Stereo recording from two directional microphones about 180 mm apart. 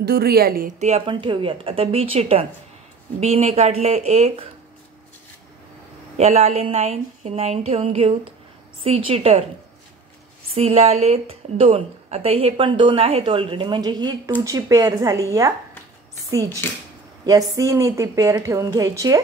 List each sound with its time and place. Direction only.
0.0 s a woman's voice: 60° right (ahead or behind); by 4.5 s 35° right (ahead or behind)
6.1 s a woman's voice: 35° right (ahead or behind)
10.5 s a woman's voice: 35° right (ahead or behind)